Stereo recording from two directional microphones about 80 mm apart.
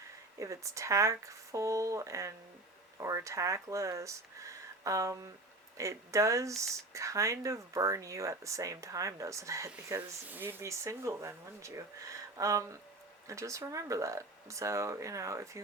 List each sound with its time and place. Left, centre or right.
0.3 s speech: right
10.2 s speech: right
10.6 s speech: right